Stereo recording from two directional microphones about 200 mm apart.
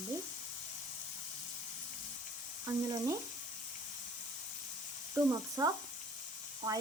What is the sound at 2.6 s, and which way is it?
Speech, 15° right (ahead or behind).